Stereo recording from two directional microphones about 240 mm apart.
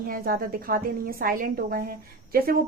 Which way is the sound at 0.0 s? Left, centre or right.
Right.